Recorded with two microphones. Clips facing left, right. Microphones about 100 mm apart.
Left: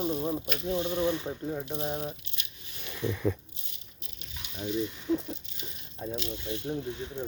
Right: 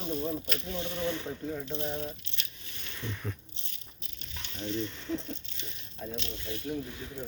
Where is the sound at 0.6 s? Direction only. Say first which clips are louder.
Left 8 dB; 20° left (ahead or behind).